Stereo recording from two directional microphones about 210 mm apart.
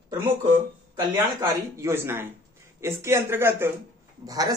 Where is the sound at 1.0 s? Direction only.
15° right (ahead or behind).